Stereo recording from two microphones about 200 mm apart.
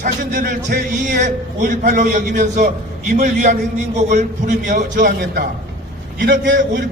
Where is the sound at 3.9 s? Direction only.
35° right (ahead or behind).